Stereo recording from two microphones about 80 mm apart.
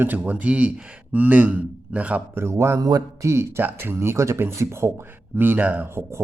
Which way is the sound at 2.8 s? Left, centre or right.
Right.